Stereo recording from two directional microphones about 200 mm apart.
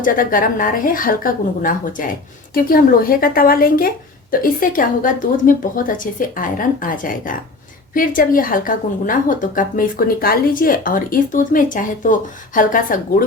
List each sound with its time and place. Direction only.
0.0 s a woman's voice: 45° left (ahead or behind)